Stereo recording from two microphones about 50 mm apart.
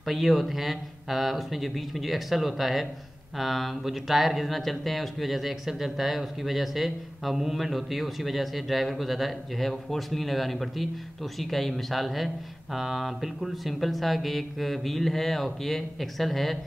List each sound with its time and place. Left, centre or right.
0.0 s speech: centre